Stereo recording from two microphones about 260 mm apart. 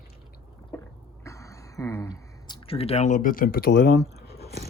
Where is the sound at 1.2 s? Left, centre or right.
Centre; by 3.9 s left.